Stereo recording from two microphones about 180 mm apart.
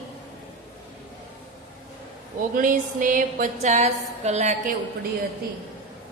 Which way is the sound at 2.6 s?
50° right (ahead or behind).